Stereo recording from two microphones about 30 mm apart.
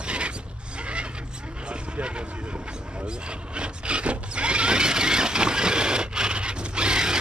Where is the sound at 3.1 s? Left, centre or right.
Right.